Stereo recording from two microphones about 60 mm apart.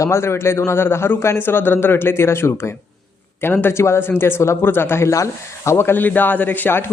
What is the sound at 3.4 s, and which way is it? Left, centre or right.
A man's voice, left.